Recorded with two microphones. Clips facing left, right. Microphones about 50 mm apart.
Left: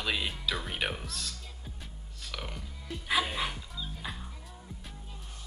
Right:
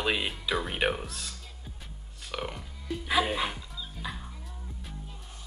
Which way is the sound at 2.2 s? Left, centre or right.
Right.